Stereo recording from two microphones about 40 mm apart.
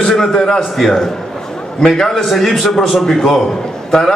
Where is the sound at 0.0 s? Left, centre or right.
Centre.